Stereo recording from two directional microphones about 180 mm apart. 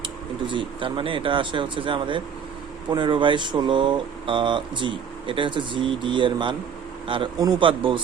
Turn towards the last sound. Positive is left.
turn(degrees=-30)  # may be behind; listen again after turning